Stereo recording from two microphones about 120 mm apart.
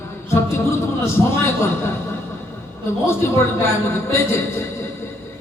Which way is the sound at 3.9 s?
20° left (ahead or behind).